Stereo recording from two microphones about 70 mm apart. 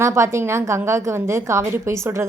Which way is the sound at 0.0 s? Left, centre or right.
Right.